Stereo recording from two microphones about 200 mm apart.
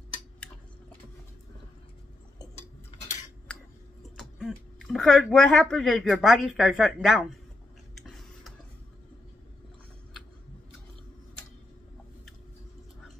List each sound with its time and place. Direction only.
3.5 s a sound: 5° left (ahead or behind)
4.2 s speech: centre (ahead or behind)
8.0 s tick-tock: centre (ahead or behind)